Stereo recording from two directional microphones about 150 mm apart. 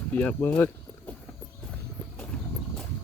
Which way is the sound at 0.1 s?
10° left (ahead or behind).